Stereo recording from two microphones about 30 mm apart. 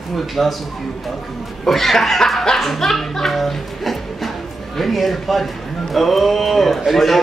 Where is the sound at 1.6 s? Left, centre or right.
Centre.